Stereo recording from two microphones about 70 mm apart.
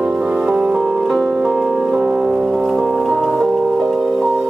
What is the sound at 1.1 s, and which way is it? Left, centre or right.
Music, centre.